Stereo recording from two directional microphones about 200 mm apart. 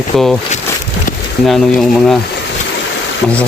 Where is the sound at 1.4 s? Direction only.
Centre (ahead or behind).